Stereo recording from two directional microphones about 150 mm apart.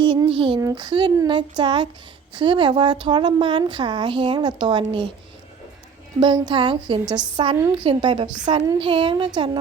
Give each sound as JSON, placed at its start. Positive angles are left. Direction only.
{"t": 0.0, "sound": "a woman's voice", "side_deg": -30}
{"t": 6.1, "sound": "a woman's voice", "side_deg": -30}